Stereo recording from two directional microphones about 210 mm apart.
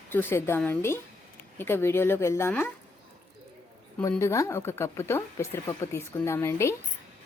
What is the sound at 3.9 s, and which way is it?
Speech, 10° left (ahead or behind).